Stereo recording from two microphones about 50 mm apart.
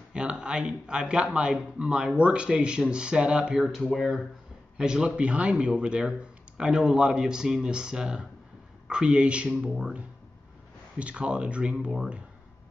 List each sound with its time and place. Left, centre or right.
0.1 s speech: centre
3.5 s speech: centre
4.7 s speech: centre